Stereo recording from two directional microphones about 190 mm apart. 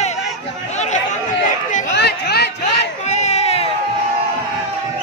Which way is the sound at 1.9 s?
60° left (ahead or behind).